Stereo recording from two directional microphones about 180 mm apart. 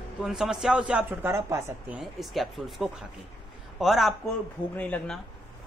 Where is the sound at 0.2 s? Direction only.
5° right (ahead or behind).